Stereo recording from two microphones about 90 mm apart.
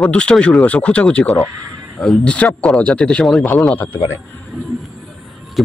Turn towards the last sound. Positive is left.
turn(degrees=0)  # may be behind; listen again after turning